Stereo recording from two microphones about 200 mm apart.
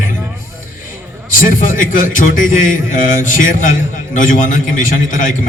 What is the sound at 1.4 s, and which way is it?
Speech, 40° left (ahead or behind).